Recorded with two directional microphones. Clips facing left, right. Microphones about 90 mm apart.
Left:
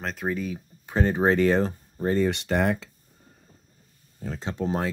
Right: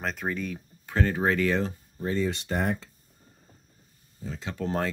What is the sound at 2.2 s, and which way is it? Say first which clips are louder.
Speech: left 4 dB; 75° left (ahead or behind).